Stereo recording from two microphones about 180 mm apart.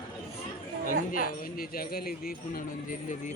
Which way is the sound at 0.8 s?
50° left (ahead or behind).